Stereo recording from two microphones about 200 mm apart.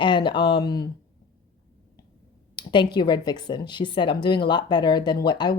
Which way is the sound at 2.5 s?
25° left (ahead or behind).